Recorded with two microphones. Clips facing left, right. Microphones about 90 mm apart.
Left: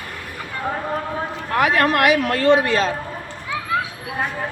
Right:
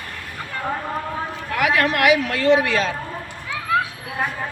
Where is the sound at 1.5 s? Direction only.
35° left (ahead or behind).